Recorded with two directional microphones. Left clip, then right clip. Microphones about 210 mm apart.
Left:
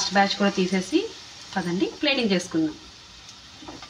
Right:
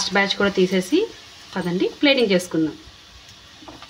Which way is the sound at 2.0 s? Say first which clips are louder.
Right 7 dB; 55° right (ahead or behind).